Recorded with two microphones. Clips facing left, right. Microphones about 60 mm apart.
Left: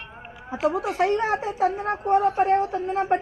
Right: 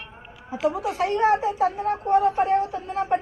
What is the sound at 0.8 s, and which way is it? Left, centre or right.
Speech, left.